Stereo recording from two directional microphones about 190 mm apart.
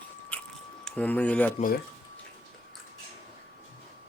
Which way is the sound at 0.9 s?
5° left (ahead or behind).